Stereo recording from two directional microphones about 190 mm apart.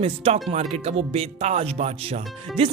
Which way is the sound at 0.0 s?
30° right (ahead or behind).